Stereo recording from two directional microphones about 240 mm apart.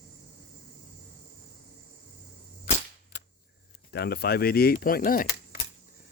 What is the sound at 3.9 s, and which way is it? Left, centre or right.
Speech, left.